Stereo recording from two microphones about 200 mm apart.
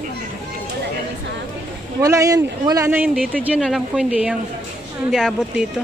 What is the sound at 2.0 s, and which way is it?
A woman's voice, 15° right (ahead or behind).